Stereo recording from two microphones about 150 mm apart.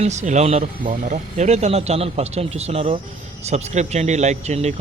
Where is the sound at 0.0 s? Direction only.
50° right (ahead or behind).